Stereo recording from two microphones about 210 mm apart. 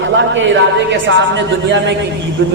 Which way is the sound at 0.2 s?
60° right (ahead or behind).